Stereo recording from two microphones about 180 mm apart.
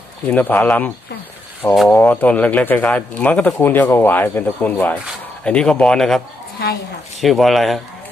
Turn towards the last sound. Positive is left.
turn(degrees=0)  # may be behind; listen again after turning